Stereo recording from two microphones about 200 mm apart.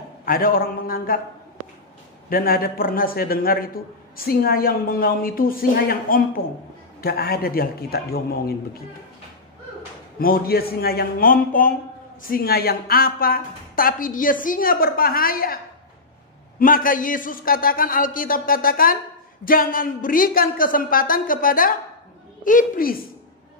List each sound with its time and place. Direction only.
0.2 s a man's voice: 45° left (ahead or behind)
2.2 s a man's voice: 45° left (ahead or behind)
10.1 s a man's voice: 45° left (ahead or behind)